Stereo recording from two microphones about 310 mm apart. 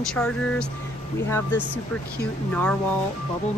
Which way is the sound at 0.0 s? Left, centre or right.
Centre.